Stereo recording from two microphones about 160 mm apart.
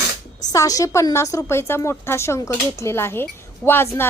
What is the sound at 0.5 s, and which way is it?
A woman's voice, 20° left (ahead or behind).